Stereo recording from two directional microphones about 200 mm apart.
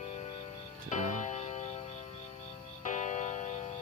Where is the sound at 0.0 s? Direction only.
35° left (ahead or behind).